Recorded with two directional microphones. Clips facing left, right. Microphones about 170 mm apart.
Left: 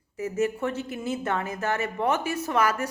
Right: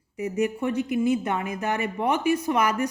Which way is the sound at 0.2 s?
15° right (ahead or behind).